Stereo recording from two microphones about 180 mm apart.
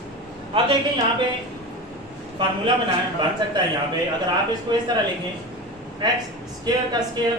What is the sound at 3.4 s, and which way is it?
Speech, 25° right (ahead or behind).